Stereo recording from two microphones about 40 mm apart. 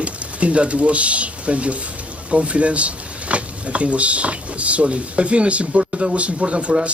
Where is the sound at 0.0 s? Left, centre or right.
Right.